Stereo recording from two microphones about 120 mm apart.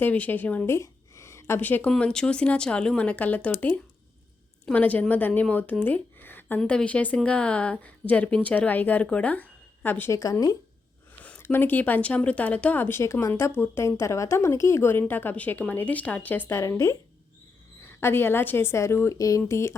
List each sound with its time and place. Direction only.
0.0 s a woman's voice: 15° left (ahead or behind)
10.2 s speech: 30° left (ahead or behind)
11.2 s a woman's voice: 15° left (ahead or behind)